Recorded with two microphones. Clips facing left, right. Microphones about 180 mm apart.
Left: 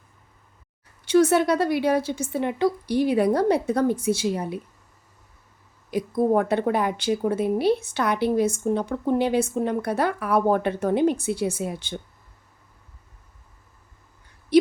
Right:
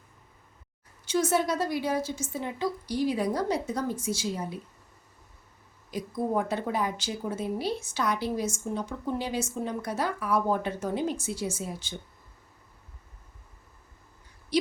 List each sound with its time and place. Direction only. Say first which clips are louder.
1.0 s a woman's voice: left 8 dB; 65° left (ahead or behind)
5.9 s a woman's voice: left 8 dB; 60° left (ahead or behind)
14.5 s a sound: left 9 dB; 55° left (ahead or behind)